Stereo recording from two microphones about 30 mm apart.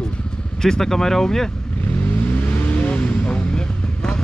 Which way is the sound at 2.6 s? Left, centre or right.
Left.